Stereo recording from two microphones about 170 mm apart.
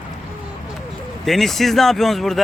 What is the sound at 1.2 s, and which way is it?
Speech, centre (ahead or behind).